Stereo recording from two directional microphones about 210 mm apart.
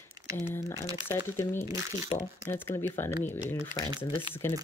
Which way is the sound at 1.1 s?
10° left (ahead or behind).